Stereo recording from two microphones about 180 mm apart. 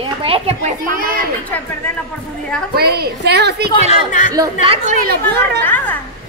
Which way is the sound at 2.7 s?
60° right (ahead or behind).